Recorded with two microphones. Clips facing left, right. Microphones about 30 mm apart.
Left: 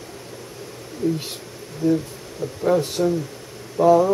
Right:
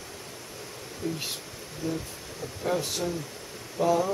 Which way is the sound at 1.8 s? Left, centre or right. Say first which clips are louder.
Left 12 dB; left.